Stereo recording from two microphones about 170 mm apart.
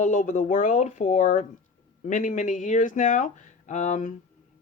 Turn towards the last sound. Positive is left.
turn(degrees=45)  # may be behind; listen again after turning